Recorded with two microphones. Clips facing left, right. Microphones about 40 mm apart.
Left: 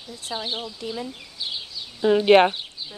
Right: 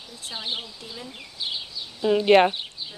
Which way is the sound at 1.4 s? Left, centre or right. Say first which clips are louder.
Right 1 dB; centre.